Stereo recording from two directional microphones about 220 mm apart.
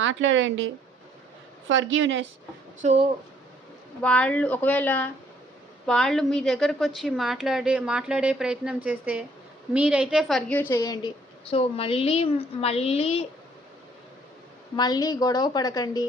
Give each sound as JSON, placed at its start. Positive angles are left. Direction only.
{"t": 0.0, "sound": "speech", "side_deg": -60}
{"t": 2.8, "sound": "speech", "side_deg": -30}
{"t": 4.0, "sound": "a woman's voice", "side_deg": 5}
{"t": 14.8, "sound": "a woman's voice", "side_deg": 20}